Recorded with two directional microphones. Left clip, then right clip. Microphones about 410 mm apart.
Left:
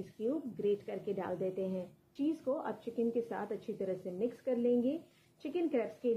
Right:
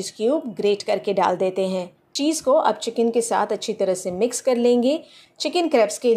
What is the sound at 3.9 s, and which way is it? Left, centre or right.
A woman's voice, centre.